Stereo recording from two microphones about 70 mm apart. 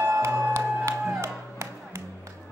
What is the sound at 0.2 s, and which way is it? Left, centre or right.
Music, right.